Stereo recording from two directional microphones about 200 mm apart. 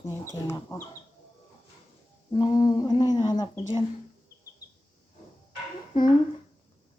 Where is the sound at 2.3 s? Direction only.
20° left (ahead or behind).